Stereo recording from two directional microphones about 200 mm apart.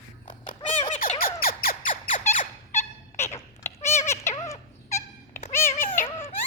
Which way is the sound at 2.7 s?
10° left (ahead or behind).